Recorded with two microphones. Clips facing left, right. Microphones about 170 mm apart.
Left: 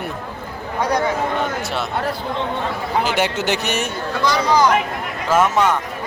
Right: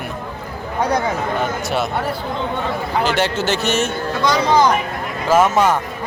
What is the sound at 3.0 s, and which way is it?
Speech, 15° left (ahead or behind).